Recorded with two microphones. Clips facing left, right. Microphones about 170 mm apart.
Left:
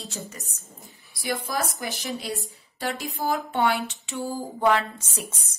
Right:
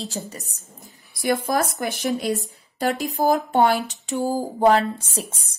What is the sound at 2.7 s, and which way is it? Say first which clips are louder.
Speech: right 7 dB; 40° right (ahead or behind).